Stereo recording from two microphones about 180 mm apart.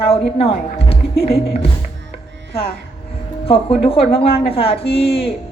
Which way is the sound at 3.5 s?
30° left (ahead or behind).